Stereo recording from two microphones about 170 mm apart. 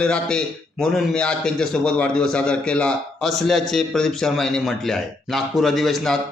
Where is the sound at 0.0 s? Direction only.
5° left (ahead or behind).